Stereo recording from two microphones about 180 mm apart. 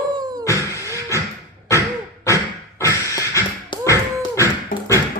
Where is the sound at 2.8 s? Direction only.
15° left (ahead or behind).